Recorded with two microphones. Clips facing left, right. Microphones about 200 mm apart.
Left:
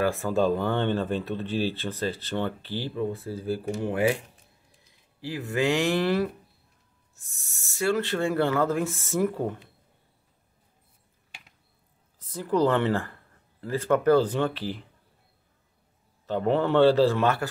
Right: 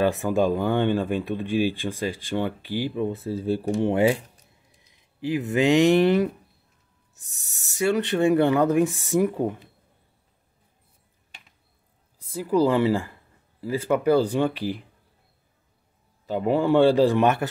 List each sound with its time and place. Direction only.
0.0 s speech: 20° right (ahead or behind)
5.2 s speech: 20° right (ahead or behind)
7.7 s speech: 20° right (ahead or behind)
12.2 s speech: 10° right (ahead or behind)
16.3 s speech: 10° right (ahead or behind)